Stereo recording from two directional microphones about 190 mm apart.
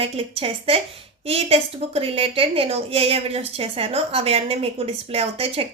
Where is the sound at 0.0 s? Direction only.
30° right (ahead or behind).